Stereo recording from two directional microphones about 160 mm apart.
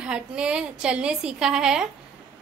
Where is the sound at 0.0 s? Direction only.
5° right (ahead or behind).